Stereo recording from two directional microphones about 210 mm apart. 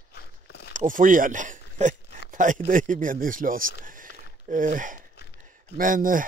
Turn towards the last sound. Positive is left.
turn(degrees=-40)  # may be behind; listen again after turning